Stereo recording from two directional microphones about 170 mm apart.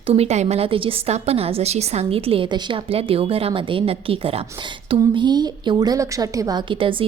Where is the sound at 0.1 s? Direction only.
40° right (ahead or behind).